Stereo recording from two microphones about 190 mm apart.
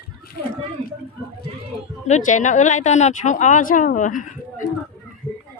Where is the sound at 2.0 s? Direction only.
40° left (ahead or behind).